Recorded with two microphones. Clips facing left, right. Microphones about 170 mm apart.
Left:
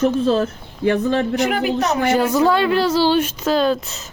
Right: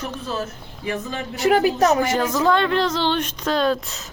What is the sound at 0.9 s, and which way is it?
Speech, 65° left (ahead or behind).